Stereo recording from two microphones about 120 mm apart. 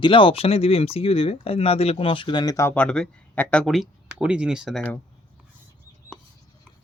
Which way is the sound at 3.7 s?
5° right (ahead or behind).